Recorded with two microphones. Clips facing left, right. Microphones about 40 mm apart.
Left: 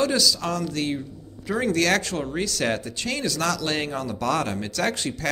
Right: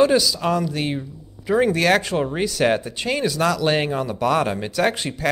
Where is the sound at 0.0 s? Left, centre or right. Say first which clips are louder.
Right 6 dB; centre.